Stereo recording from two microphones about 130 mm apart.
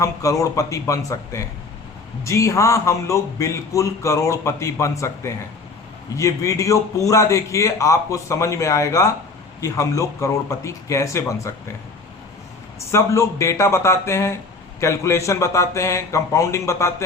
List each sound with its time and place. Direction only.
0.0 s a man's voice: 25° left (ahead or behind)
12.9 s a man's voice: 20° left (ahead or behind)